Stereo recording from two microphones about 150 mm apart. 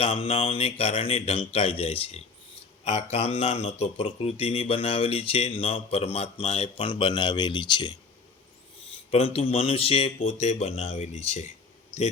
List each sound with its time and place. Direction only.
0.0 s speech: 40° left (ahead or behind)
9.1 s speech: 35° left (ahead or behind)